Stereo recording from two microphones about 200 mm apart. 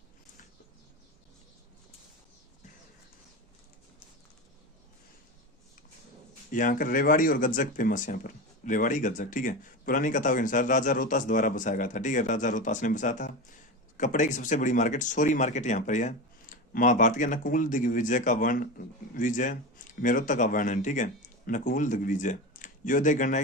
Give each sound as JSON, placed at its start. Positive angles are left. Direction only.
{"t": 6.5, "sound": "speech", "side_deg": 40}